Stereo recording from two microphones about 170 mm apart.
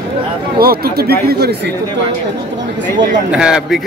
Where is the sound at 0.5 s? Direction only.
65° right (ahead or behind).